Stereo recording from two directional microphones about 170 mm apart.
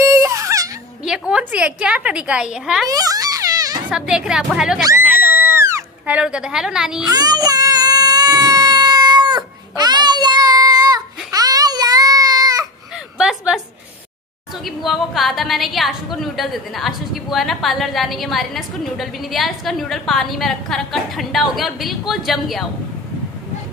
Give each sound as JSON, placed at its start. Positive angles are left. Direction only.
{"t": 0.0, "sound": "baby cry", "side_deg": -20}
{"t": 1.0, "sound": "a woman's voice", "side_deg": -5}
{"t": 2.9, "sound": "music", "side_deg": -20}
{"t": 3.9, "sound": "a woman's voice", "side_deg": -5}
{"t": 5.3, "sound": "cat", "side_deg": -15}
{"t": 7.1, "sound": "baby cry", "side_deg": -25}
{"t": 13.2, "sound": "a sound", "side_deg": -5}
{"t": 14.6, "sound": "a woman's voice", "side_deg": 0}